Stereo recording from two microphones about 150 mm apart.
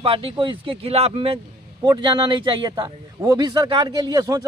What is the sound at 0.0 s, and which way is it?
A man's voice, 40° right (ahead or behind).